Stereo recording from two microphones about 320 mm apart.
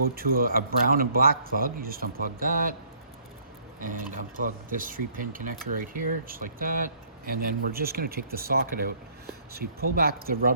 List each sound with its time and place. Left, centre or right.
0.2 s speech: right
3.8 s speech: right